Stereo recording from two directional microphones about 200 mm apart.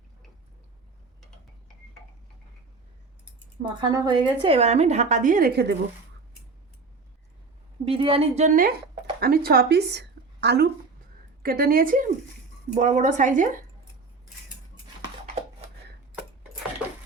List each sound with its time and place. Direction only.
3.6 s a woman's voice: 20° right (ahead or behind); by 5.7 s 50° right (ahead or behind)
7.9 s a woman's voice: 30° right (ahead or behind)